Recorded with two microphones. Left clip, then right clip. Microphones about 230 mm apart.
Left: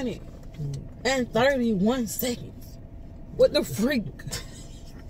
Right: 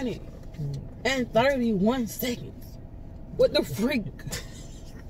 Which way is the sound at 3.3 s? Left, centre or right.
Left.